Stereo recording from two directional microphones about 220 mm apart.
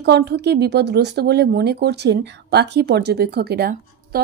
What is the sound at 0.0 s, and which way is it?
Speech, 50° right (ahead or behind).